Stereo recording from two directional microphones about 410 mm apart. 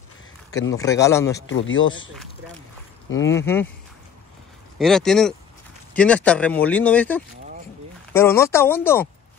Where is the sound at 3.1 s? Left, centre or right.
Left.